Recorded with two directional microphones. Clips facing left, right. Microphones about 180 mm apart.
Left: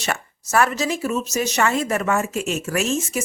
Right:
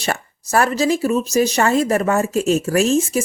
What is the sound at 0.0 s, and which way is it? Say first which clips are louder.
Speech: right 3 dB; 35° right (ahead or behind).